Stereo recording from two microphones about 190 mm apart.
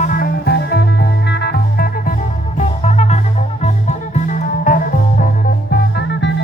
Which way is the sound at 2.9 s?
35° left (ahead or behind).